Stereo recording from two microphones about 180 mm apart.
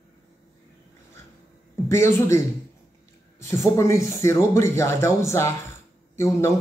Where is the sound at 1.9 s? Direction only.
15° left (ahead or behind).